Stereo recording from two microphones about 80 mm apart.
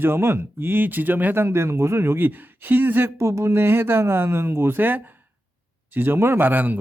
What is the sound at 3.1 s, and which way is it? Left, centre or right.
Speech, right.